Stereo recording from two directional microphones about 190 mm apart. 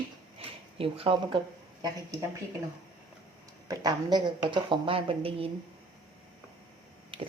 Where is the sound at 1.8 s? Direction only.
20° right (ahead or behind).